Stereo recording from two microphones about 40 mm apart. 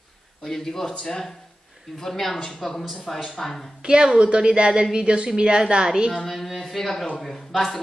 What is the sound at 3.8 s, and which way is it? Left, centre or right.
A woman's voice, right.